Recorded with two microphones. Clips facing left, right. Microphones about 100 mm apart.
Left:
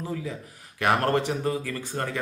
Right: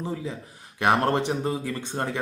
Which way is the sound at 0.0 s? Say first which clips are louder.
Right 1 dB; 25° right (ahead or behind).